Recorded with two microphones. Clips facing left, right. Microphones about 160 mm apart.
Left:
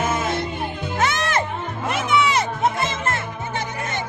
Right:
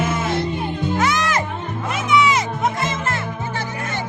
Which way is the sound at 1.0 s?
25° left (ahead or behind).